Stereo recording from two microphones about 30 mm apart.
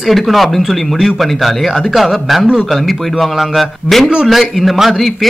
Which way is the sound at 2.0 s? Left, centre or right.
Centre.